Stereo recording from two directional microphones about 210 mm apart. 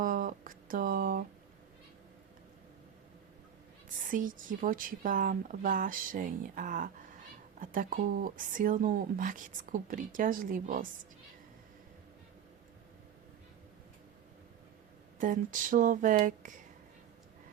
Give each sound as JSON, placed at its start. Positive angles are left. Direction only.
{"t": 0.0, "sound": "a sound", "side_deg": -40}
{"t": 3.8, "sound": "speech", "side_deg": -40}
{"t": 15.2, "sound": "speech", "side_deg": -40}